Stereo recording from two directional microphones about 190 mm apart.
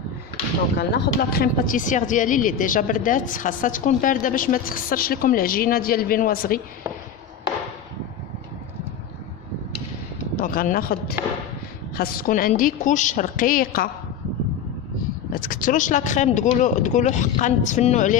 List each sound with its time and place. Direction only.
0.7 s speech: 60° left (ahead or behind)
10.3 s speech: 45° left (ahead or behind)
15.3 s speech: 50° left (ahead or behind)